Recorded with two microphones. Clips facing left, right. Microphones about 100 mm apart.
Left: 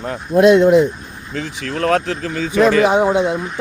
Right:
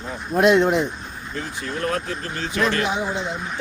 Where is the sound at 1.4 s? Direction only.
90° left.